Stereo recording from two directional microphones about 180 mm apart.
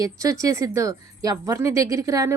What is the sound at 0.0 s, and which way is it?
A woman's voice, 20° right (ahead or behind).